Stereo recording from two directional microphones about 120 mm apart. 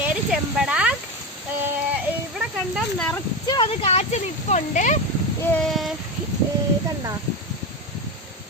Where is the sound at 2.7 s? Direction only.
5° left (ahead or behind).